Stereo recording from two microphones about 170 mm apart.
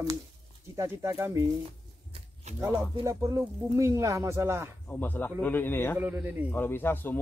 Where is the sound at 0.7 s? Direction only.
15° right (ahead or behind).